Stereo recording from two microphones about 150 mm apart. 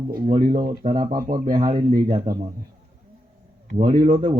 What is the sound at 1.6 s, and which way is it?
Speech, 30° right (ahead or behind).